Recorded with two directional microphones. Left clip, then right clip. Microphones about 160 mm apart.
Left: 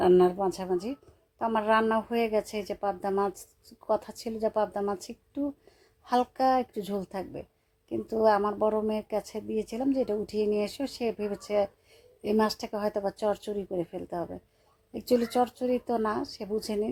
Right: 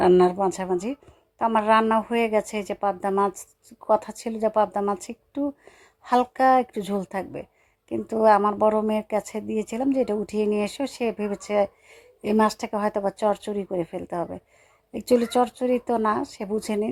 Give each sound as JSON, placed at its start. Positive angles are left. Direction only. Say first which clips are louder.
{"t": 0.0, "sound": "speech", "louder": "right 4 dB", "side_deg": -25}